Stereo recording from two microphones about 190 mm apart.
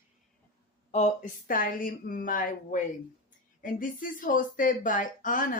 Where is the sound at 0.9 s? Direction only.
40° left (ahead or behind).